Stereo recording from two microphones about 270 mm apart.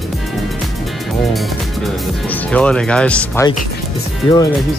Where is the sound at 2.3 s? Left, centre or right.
Centre.